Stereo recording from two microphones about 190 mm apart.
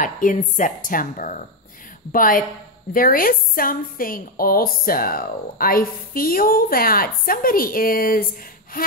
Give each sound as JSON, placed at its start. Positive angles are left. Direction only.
{"t": 0.0, "sound": "a woman's voice", "side_deg": 45}